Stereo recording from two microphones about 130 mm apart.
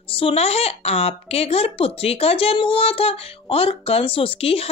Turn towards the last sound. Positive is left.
turn(degrees=50)  # may be behind; listen again after turning